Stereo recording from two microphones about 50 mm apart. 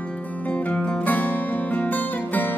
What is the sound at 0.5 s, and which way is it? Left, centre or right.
Music, left.